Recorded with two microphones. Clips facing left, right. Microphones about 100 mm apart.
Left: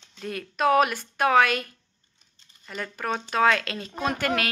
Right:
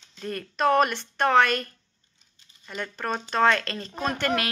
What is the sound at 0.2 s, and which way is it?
Speech, 5° left (ahead or behind).